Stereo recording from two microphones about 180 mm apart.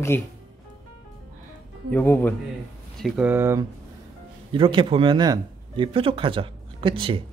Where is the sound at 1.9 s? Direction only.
10° left (ahead or behind).